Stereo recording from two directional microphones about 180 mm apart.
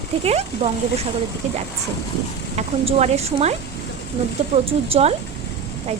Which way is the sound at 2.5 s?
35° right (ahead or behind).